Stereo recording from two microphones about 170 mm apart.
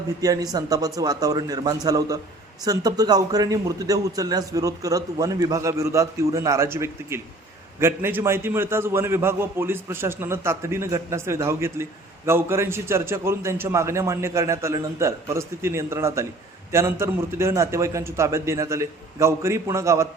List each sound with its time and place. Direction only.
0.2 s a man's voice: 20° right (ahead or behind)